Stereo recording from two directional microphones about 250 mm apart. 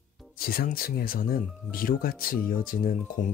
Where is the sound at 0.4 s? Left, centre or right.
Left.